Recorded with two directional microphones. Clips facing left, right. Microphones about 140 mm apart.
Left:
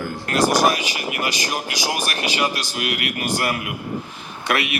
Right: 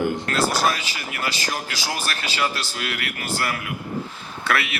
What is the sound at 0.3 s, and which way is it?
Speech, 15° left (ahead or behind).